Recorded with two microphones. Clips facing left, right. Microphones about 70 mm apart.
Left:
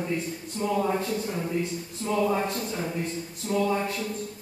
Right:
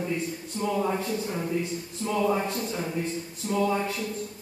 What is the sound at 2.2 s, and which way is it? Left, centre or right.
A man's voice, centre.